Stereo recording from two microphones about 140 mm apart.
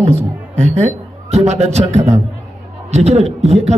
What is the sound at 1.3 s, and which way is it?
A man's voice, 50° right (ahead or behind).